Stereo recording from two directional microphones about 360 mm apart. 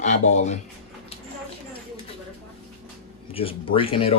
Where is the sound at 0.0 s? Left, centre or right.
Centre.